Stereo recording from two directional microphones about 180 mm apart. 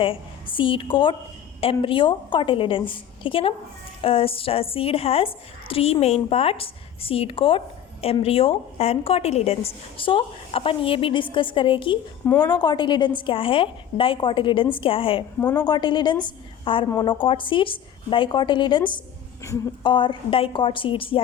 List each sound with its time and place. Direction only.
0.0 s a woman's voice: 30° left (ahead or behind)
12.2 s a woman's voice: 10° left (ahead or behind)
12.5 s a woman's voice: 25° left (ahead or behind)
15.4 s a woman's voice: 15° left (ahead or behind)